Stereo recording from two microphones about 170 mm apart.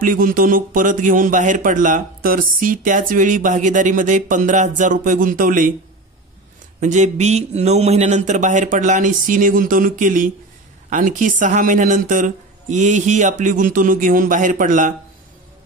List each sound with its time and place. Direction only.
0.0 s a man's voice: 55° right (ahead or behind)
6.8 s a man's voice: 45° right (ahead or behind)